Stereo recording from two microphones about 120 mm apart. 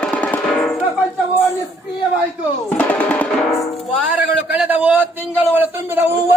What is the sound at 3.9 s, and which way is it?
A man's voice, 10° right (ahead or behind).